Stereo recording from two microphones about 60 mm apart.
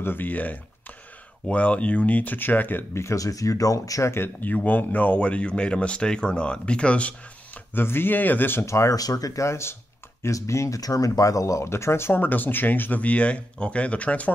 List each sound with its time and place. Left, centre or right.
0.0 s speech: left
2.9 s speech: left
3.2 s speech: left
4.1 s speech: left
7.7 s speech: left
8.6 s speech: left
8.9 s speech: left
9.5 s speech: left
12.2 s speech: left